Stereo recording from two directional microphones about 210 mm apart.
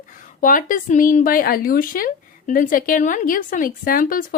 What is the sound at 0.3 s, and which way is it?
Speech, 40° left (ahead or behind).